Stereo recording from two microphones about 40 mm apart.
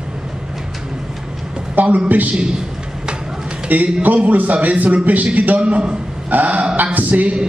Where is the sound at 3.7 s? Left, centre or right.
Right.